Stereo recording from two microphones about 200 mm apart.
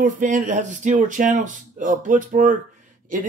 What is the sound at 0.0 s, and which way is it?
Speech, 40° right (ahead or behind).